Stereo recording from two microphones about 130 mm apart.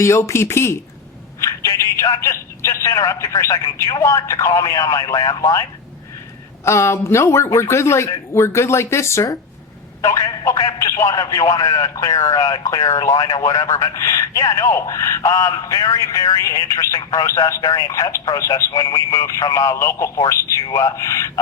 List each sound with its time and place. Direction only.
0.0 s a man's voice: 20° left (ahead or behind)
6.7 s a man's voice: 20° left (ahead or behind)